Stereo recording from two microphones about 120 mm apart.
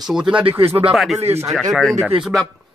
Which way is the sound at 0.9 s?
Centre (ahead or behind).